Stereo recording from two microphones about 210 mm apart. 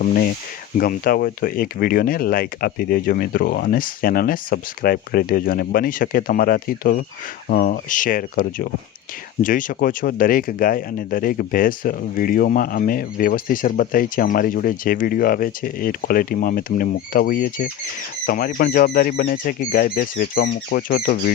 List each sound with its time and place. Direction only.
0.0 s speech: 45° left (ahead or behind)